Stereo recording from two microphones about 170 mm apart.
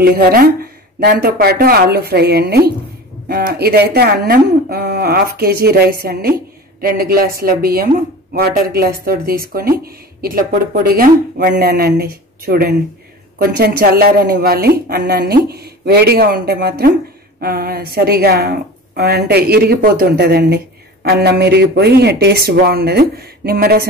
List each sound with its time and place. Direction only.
0.0 s a woman's voice: 65° right (ahead or behind)